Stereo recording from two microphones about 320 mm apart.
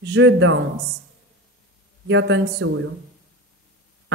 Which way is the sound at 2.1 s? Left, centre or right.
Right.